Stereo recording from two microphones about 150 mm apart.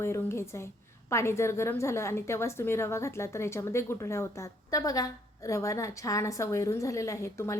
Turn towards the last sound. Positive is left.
turn(degrees=20)  # may be behind; listen again after turning